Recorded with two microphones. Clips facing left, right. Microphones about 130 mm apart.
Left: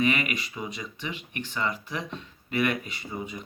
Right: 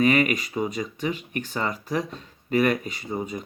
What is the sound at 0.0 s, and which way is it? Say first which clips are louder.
Speech: right 6 dB; 40° right (ahead or behind).